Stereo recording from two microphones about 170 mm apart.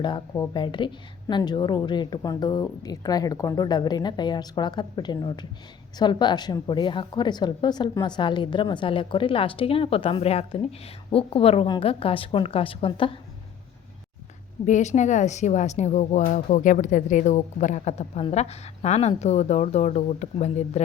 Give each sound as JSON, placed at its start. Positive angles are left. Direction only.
{"t": 0.0, "sound": "a woman's voice", "side_deg": 25}
{"t": 14.6, "sound": "speech", "side_deg": 45}